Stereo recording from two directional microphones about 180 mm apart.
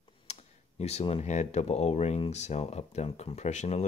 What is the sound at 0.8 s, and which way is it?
Speech, 35° left (ahead or behind).